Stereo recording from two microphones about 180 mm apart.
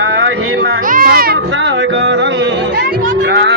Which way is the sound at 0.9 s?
50° right (ahead or behind).